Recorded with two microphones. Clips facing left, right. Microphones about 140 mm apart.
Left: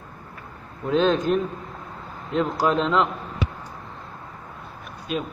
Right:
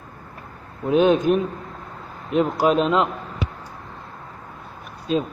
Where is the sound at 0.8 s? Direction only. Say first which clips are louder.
Right 4 dB; 15° right (ahead or behind).